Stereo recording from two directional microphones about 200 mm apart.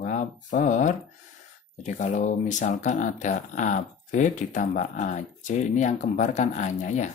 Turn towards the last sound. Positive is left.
turn(degrees=35)  # may be behind; listen again after turning